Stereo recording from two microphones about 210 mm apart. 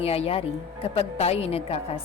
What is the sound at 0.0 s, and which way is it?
A woman's voice, 30° left (ahead or behind).